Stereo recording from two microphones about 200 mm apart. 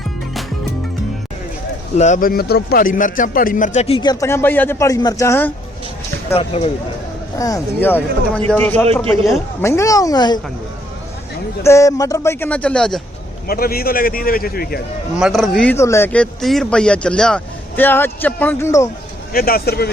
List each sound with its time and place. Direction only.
2.0 s a man's voice: 40° left (ahead or behind); by 5.5 s 15° left (ahead or behind)
6.3 s speech: 30° left (ahead or behind)
7.3 s speech: 15° left (ahead or behind)
11.6 s speech: 15° left (ahead or behind)
13.5 s a man's voice: 50° left (ahead or behind)
15.1 s speech: centre (ahead or behind)
19.3 s a man's voice: 45° left (ahead or behind)